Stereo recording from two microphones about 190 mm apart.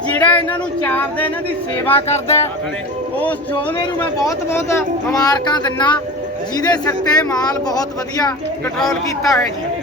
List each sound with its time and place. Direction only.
0.1 s female singing: 10° left (ahead or behind)
2.0 s speech: 35° left (ahead or behind)
3.2 s speech: 10° left (ahead or behind)